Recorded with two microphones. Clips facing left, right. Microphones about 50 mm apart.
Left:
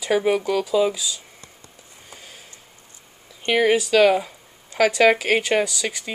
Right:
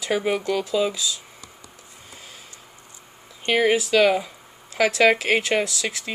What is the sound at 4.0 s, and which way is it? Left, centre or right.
Speech, centre.